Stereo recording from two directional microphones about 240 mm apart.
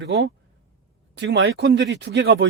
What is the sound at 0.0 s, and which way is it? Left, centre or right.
Speech, right.